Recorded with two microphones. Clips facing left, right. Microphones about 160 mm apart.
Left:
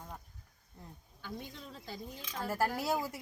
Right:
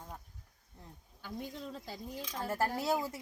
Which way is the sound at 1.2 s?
40° right (ahead or behind).